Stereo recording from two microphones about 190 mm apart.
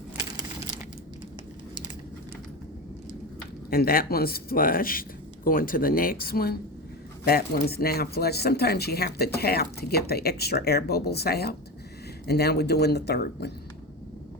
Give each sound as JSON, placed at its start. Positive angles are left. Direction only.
{"t": 3.7, "sound": "speech", "side_deg": 50}